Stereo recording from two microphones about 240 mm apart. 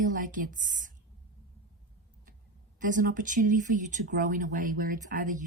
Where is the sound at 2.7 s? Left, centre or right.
Right.